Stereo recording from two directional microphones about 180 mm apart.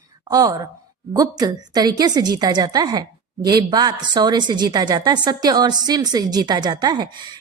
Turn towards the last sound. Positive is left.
turn(degrees=-25)  # may be behind; listen again after turning